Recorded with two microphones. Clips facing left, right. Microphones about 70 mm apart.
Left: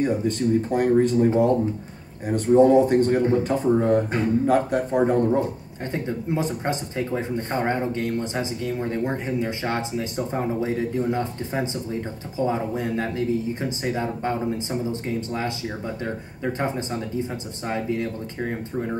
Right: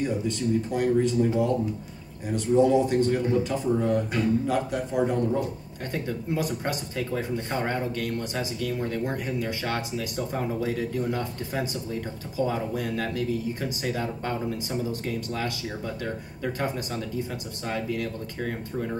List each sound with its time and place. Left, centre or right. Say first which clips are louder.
0.0 s speech: left 5 dB; left
5.9 s speech: left 3 dB; left